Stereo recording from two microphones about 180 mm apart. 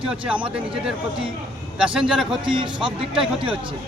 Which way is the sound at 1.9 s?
5° right (ahead or behind).